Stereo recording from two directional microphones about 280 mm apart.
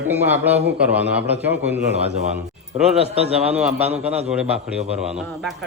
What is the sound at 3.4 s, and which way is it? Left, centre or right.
Speech, centre.